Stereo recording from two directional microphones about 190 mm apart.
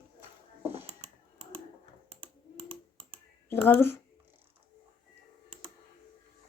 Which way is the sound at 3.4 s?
10° left (ahead or behind).